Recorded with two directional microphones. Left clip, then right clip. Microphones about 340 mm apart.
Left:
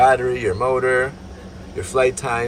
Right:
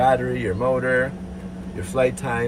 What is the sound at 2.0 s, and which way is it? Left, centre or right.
Speech, centre.